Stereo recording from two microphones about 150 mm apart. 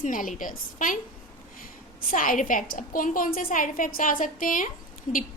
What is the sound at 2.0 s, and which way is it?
A woman's voice, 60° left (ahead or behind).